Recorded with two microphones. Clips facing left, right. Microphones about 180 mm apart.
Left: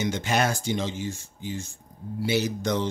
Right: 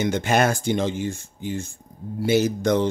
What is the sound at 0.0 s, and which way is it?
Speech, 55° right (ahead or behind).